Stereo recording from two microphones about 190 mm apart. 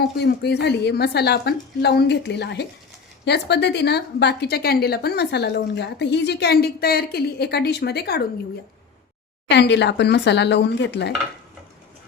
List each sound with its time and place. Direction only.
0.0 s a woman's voice: 60° left (ahead or behind)
9.5 s a woman's voice: 65° left (ahead or behind)